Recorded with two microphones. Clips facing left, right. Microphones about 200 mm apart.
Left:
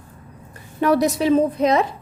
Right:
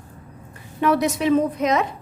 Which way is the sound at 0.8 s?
35° left (ahead or behind).